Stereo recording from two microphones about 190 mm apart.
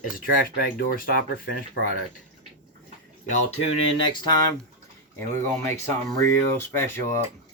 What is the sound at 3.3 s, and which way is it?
Speech, 30° left (ahead or behind).